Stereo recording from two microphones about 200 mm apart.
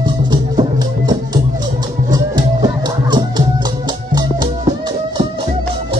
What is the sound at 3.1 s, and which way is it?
Music, 20° right (ahead or behind).